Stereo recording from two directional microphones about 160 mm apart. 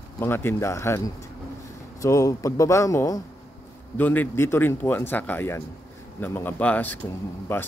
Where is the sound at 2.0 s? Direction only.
20° left (ahead or behind).